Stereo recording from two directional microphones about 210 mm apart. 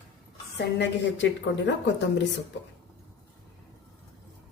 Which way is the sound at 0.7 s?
60° left (ahead or behind).